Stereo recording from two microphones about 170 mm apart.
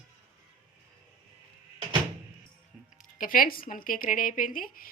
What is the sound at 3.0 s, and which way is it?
Speech, 55° left (ahead or behind).